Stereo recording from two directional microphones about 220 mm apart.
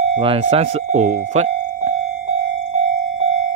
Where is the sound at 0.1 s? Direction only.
25° right (ahead or behind).